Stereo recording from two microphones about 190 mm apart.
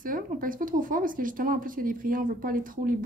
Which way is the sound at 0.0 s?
45° right (ahead or behind).